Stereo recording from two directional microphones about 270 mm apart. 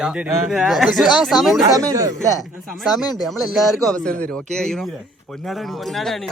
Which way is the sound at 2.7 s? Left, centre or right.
Centre.